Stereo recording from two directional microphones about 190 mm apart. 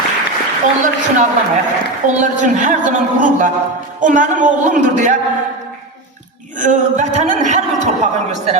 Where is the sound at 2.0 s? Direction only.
40° right (ahead or behind).